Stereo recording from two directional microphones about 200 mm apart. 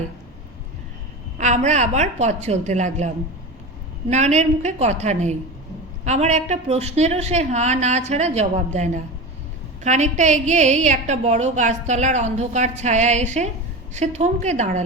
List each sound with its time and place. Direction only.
1.4 s a woman's voice: 35° right (ahead or behind)
4.1 s a woman's voice: 35° right (ahead or behind)